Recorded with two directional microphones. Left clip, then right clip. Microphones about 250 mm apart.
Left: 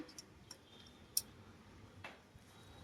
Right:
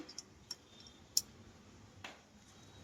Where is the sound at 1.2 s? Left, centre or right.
Centre.